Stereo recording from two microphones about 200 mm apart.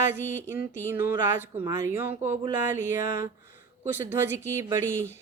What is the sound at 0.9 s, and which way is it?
Speech, 10° right (ahead or behind).